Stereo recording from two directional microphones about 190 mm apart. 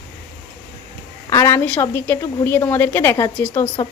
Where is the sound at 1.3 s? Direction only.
15° left (ahead or behind).